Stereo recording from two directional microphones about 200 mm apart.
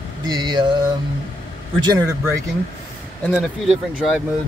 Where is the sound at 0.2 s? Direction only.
20° right (ahead or behind).